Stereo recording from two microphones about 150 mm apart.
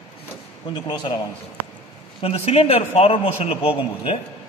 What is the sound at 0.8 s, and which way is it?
Speech, 30° left (ahead or behind).